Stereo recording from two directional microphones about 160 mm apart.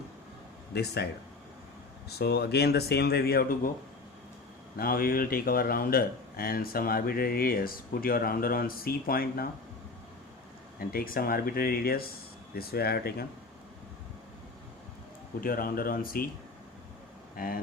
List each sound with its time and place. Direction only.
0.7 s speech: 90° left
2.0 s speech: 90° left; by 3.7 s 65° left (ahead or behind)
4.8 s a man's voice: 65° left (ahead or behind)
10.8 s a man's voice: 65° left (ahead or behind)
15.4 s speech: 65° left (ahead or behind)
17.3 s speech: 65° left (ahead or behind)